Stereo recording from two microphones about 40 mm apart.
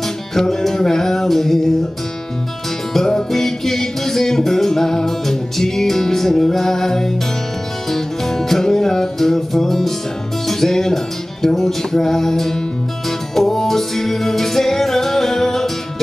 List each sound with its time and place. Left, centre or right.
0.3 s music: centre
2.9 s music: centre